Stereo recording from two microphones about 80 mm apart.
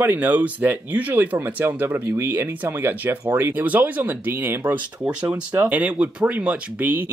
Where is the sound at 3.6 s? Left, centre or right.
Centre.